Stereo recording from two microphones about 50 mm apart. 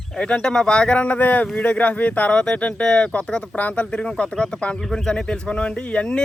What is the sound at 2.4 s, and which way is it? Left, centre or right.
Speech, centre.